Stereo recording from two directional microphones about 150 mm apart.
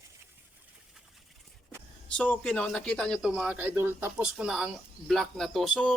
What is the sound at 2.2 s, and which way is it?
Speech, 10° left (ahead or behind).